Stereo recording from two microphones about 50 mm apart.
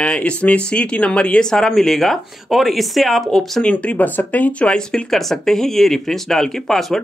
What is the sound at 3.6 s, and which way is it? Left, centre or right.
Speech, left.